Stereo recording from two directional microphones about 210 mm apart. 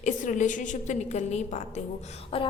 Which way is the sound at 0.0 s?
35° left (ahead or behind).